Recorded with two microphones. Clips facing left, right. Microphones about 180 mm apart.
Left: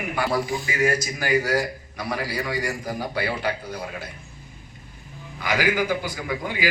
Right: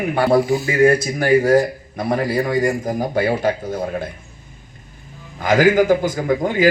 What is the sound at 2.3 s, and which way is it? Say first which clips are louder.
A man's voice: right 9 dB; 50° right (ahead or behind).